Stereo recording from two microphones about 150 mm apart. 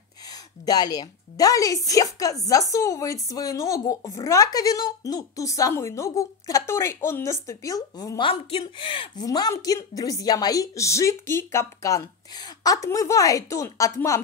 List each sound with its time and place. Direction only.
0.7 s speech: 25° left (ahead or behind)
8.3 s speech: 35° left (ahead or behind)